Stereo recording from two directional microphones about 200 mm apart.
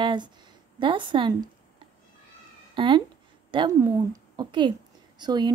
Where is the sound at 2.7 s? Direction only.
25° right (ahead or behind).